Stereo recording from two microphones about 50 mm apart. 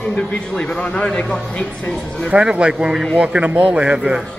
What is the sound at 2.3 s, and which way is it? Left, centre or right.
Speech, right.